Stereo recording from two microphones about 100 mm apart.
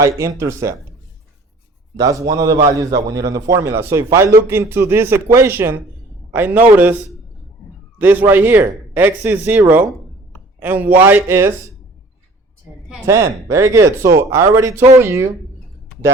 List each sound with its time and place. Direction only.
0.0 s speech: 30° right (ahead or behind)
2.0 s a man's voice: 35° right (ahead or behind)
13.1 s a man's voice: 30° right (ahead or behind)